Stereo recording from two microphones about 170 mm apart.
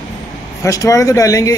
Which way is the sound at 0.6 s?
20° left (ahead or behind).